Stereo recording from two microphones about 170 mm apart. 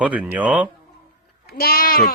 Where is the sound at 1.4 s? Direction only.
65° left (ahead or behind).